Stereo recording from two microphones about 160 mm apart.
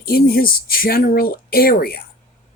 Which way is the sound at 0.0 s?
70° left (ahead or behind).